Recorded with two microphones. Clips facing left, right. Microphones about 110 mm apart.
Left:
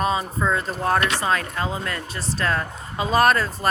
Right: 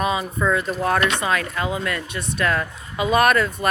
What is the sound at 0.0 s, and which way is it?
Speech, 35° left (ahead or behind).